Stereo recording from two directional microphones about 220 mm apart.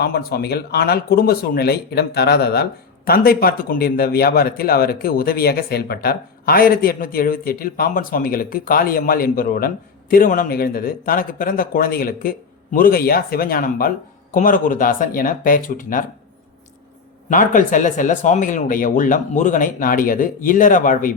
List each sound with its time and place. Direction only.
0.0 s speech: 45° left (ahead or behind)
17.2 s speech: 35° left (ahead or behind)